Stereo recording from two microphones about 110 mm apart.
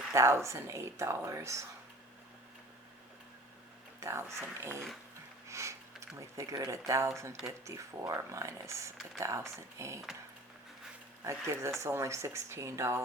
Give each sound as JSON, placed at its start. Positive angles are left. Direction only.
{"t": 0.1, "sound": "speech", "side_deg": -25}
{"t": 4.0, "sound": "speech", "side_deg": -25}
{"t": 5.5, "sound": "sniff", "side_deg": -25}
{"t": 6.1, "sound": "speech", "side_deg": -30}
{"t": 11.2, "sound": "speech", "side_deg": -25}